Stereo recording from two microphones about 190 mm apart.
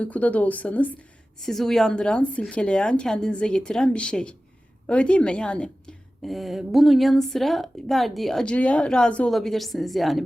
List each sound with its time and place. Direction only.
0.0 s a woman's voice: 5° left (ahead or behind)